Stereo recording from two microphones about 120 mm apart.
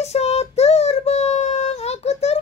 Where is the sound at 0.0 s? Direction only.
65° left (ahead or behind).